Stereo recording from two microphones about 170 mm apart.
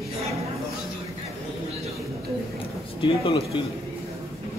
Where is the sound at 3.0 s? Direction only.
30° left (ahead or behind).